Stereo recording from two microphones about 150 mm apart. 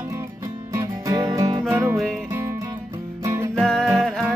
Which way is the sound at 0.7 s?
25° right (ahead or behind).